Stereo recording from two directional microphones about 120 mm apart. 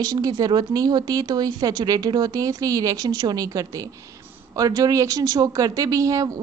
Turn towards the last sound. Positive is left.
turn(degrees=-30)  # may be behind; listen again after turning